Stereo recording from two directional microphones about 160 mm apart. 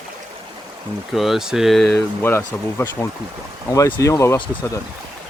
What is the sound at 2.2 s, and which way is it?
Speech, 15° left (ahead or behind).